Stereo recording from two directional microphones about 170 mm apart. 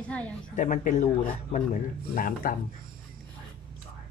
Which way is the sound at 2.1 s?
55° left (ahead or behind).